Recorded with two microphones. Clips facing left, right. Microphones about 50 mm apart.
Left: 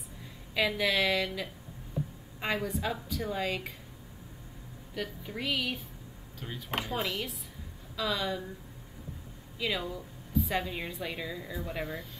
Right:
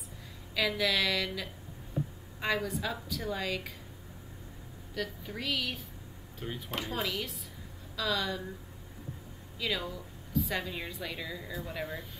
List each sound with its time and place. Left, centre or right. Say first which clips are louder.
0.6 s a woman's voice: left 1 dB; left
4.9 s speech: even; centre
6.8 s speech: left 1 dB; centre
9.6 s speech: left 1 dB; centre